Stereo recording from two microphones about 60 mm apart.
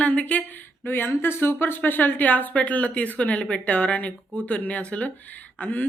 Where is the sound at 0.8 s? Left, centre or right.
Left.